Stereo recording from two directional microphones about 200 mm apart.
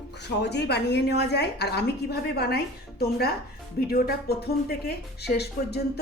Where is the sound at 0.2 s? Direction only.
60° left (ahead or behind).